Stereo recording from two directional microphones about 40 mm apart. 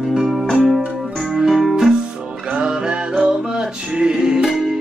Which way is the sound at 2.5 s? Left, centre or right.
Right.